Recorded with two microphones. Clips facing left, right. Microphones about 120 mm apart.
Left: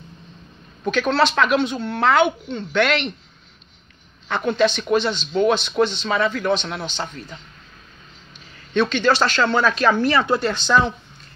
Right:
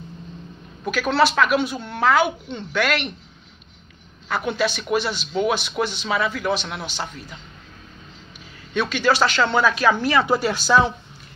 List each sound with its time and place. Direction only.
0.8 s speech: 10° right (ahead or behind)
2.4 s speech: 15° right (ahead or behind)
2.8 s speech: 5° right (ahead or behind)
4.3 s speech: 10° right (ahead or behind)
8.7 s speech: 10° right (ahead or behind)